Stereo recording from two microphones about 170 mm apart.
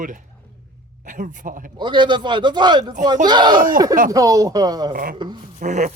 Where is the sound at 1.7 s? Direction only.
30° right (ahead or behind).